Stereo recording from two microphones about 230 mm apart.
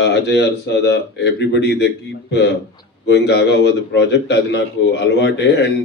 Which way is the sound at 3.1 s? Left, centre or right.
Left.